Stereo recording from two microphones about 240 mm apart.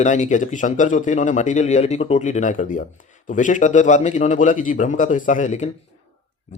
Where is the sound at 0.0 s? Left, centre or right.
Left.